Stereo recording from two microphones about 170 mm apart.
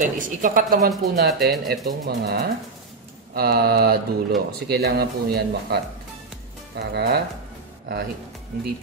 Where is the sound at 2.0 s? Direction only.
70° right (ahead or behind).